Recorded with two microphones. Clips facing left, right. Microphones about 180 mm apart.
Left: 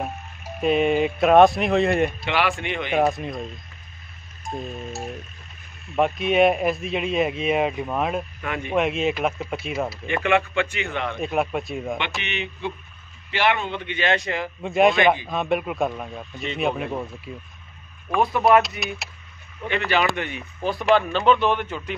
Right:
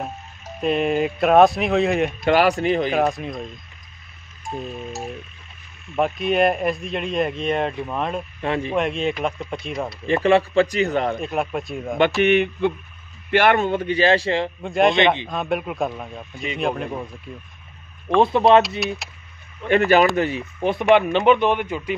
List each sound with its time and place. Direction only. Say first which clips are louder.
0.6 s speech: left 1 dB; centre (ahead or behind)
2.2 s a man's voice: right 7 dB; 40° right (ahead or behind)
2.9 s speech: even; centre (ahead or behind)
4.5 s speech: right 1 dB; centre (ahead or behind)
5.9 s speech: even; centre (ahead or behind)
8.4 s a man's voice: right 6 dB; 30° right (ahead or behind)
8.7 s speech: even; centre (ahead or behind)
10.0 s a man's voice: right 6 dB; 35° right (ahead or behind)
11.1 s speech: even; centre (ahead or behind)
12.2 s a man's voice: right 13 dB; 50° right (ahead or behind); by 14.5 s 30° right (ahead or behind)
14.6 s speech: left 1 dB; centre (ahead or behind)
18.2 s speech: right 3 dB; 25° right (ahead or behind)
18.8 s speech: right 5 dB; centre (ahead or behind)
19.7 s speech: right 7 dB; 45° right (ahead or behind); by 21.9 s 10° right (ahead or behind)